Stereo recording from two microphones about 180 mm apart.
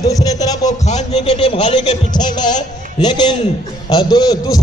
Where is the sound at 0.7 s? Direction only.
40° left (ahead or behind).